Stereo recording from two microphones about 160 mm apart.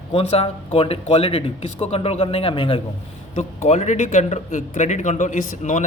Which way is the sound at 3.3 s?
45° left (ahead or behind).